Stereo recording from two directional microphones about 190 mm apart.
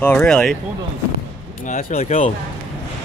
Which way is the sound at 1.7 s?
45° left (ahead or behind).